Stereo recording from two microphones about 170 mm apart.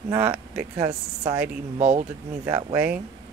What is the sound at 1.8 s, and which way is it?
Speech, 40° right (ahead or behind).